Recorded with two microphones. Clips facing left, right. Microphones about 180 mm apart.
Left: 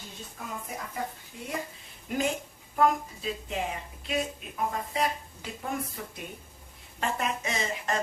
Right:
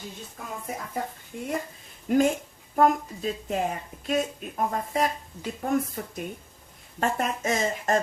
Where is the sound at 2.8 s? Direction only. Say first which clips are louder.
Right 3 dB; 45° right (ahead or behind).